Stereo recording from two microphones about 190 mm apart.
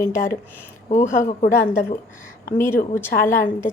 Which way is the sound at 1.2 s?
45° left (ahead or behind).